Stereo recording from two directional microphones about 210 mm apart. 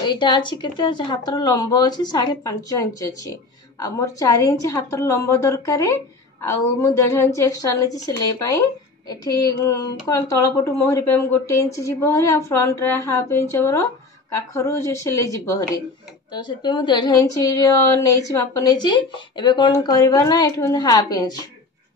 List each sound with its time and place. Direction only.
0.0 s speech: 20° left (ahead or behind)